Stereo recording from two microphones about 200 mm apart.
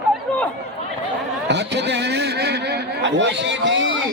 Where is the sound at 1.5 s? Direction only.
60° right (ahead or behind).